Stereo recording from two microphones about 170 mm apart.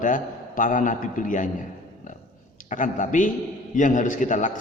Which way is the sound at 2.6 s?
50° left (ahead or behind).